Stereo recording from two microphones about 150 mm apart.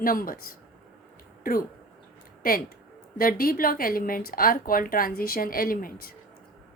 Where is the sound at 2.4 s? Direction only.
75° left (ahead or behind).